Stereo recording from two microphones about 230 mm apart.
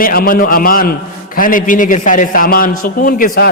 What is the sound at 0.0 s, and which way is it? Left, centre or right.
A man's voice, left.